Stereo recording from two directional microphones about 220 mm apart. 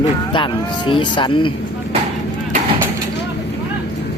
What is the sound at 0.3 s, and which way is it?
Speech, 25° left (ahead or behind).